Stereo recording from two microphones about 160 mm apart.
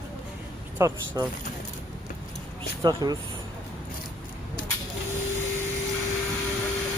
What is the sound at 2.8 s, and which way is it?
Speech, 25° right (ahead or behind).